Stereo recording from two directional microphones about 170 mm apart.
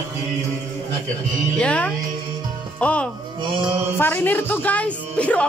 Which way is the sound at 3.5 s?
30° right (ahead or behind).